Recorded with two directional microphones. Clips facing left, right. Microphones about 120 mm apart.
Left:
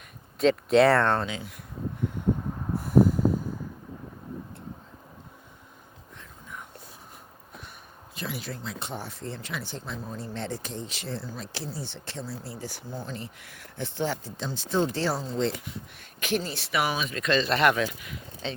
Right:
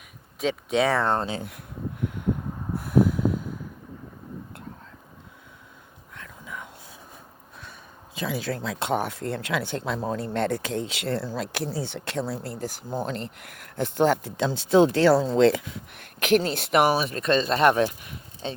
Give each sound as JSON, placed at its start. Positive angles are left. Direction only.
{"t": 0.3, "sound": "speech", "side_deg": 0}
{"t": 1.4, "sound": "speech", "side_deg": -60}
{"t": 2.7, "sound": "snort", "side_deg": -65}
{"t": 6.1, "sound": "whispering", "side_deg": -90}
{"t": 8.1, "sound": "speech", "side_deg": -90}
{"t": 15.4, "sound": "speech", "side_deg": -90}
{"t": 16.7, "sound": "speech", "side_deg": -40}